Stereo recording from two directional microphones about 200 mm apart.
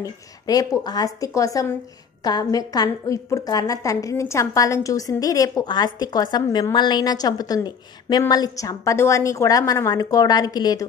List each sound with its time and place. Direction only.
0.0 s a woman's voice: 20° left (ahead or behind)